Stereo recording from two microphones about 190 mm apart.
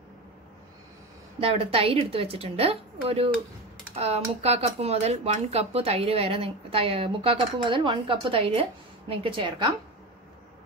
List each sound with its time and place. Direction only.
1.4 s a woman's voice: 30° right (ahead or behind)